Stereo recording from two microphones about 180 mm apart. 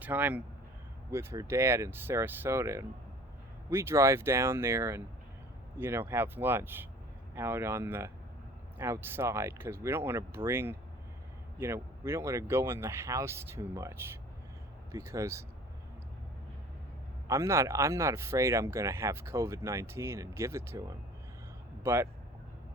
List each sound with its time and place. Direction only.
0.0 s speech: 10° right (ahead or behind)
17.2 s speech: 15° right (ahead or behind)
21.8 s speech: 15° right (ahead or behind)